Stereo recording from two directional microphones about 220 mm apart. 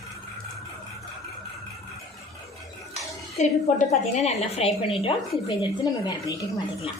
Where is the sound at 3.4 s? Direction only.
30° left (ahead or behind).